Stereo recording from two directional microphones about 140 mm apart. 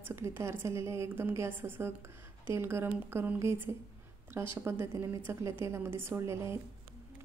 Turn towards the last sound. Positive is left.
turn(degrees=-20)  # may be behind; listen again after turning